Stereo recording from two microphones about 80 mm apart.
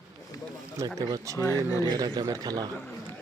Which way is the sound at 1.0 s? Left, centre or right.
Right.